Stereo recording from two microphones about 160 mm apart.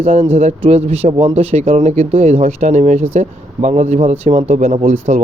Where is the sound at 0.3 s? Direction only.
40° right (ahead or behind).